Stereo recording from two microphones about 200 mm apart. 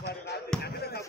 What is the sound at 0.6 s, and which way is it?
Basketball bounce, 55° left (ahead or behind).